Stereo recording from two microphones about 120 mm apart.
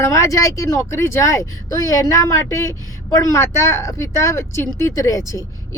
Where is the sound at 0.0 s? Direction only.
25° left (ahead or behind).